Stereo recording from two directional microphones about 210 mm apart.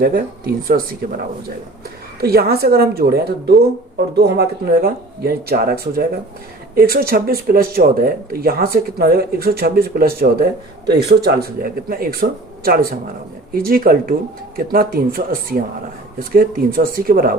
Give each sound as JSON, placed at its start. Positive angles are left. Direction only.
{"t": 0.0, "sound": "speech", "side_deg": -45}
{"t": 2.2, "sound": "speech", "side_deg": -45}